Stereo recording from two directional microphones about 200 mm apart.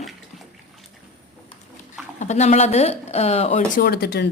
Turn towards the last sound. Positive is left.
turn(degrees=55)  # may be behind; listen again after turning